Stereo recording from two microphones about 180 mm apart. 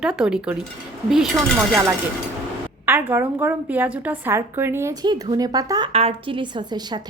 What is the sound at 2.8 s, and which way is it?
A woman's voice, 10° right (ahead or behind).